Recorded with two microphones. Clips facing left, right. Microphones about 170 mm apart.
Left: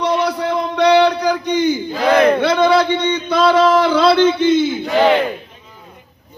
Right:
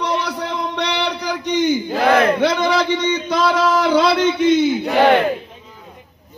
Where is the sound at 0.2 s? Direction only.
55° left (ahead or behind).